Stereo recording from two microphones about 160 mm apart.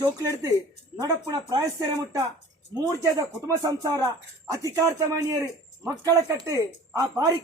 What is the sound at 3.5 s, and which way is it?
Speech, 20° right (ahead or behind).